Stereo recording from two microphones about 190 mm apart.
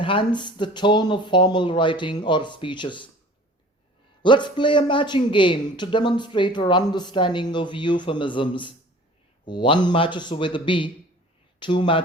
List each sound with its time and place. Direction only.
0.0 s speech: 25° left (ahead or behind)
4.2 s speech: 25° left (ahead or behind)